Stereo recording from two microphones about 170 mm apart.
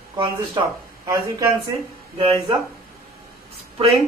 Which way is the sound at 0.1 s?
20° right (ahead or behind).